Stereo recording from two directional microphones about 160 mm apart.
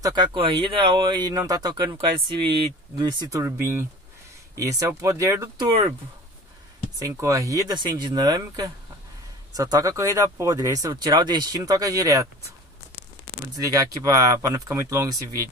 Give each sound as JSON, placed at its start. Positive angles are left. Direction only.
{"t": 0.0, "sound": "speech", "side_deg": -30}
{"t": 7.0, "sound": "speech", "side_deg": -20}
{"t": 13.6, "sound": "speech", "side_deg": -20}